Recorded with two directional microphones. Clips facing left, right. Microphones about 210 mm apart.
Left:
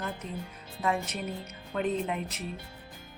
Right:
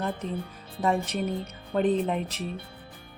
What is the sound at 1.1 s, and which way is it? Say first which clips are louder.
Speech: right 7 dB; 30° right (ahead or behind).